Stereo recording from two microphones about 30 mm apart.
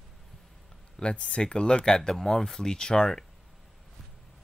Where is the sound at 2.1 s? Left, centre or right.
Centre.